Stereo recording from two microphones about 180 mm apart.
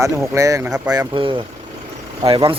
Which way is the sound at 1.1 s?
30° right (ahead or behind).